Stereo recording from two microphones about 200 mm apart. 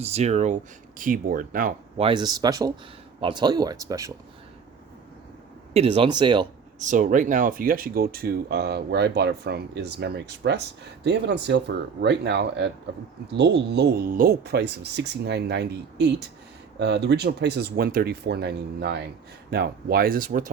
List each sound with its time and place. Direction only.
0.0 s speech: 35° right (ahead or behind)
2.0 s speech: 25° right (ahead or behind)
5.7 s speech: 30° right (ahead or behind)
6.7 s speech: 40° right (ahead or behind)